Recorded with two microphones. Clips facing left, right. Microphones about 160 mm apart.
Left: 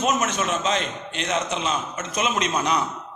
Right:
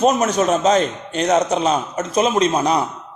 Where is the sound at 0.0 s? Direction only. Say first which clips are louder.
Right 7 dB; 35° right (ahead or behind).